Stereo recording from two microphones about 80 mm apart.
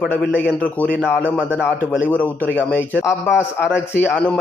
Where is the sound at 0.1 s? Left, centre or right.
Left.